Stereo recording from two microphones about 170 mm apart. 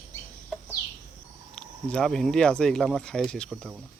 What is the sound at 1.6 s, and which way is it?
Speech, 5° left (ahead or behind).